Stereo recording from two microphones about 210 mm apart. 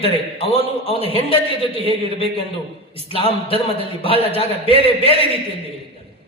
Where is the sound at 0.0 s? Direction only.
25° left (ahead or behind).